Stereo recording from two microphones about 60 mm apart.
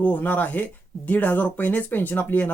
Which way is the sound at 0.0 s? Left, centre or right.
Left.